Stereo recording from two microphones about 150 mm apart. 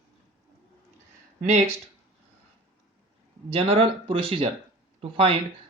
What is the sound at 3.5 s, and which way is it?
Speech, 35° right (ahead or behind).